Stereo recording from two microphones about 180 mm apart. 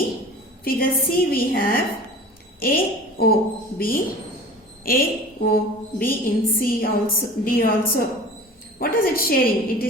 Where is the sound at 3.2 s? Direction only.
55° left (ahead or behind).